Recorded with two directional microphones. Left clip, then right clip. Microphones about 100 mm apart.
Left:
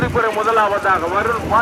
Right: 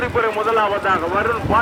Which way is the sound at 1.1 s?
30° right (ahead or behind).